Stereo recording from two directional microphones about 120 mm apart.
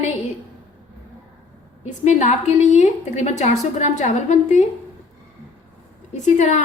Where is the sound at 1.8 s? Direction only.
65° left (ahead or behind); by 4.6 s 85° left.